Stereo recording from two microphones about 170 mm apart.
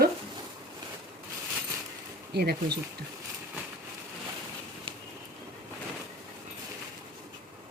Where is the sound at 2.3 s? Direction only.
70° right (ahead or behind).